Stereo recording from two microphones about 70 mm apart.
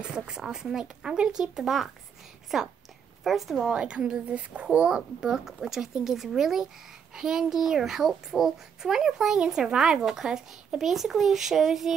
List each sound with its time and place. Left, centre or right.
0.1 s a child's voice: centre
3.7 s a child's voice: centre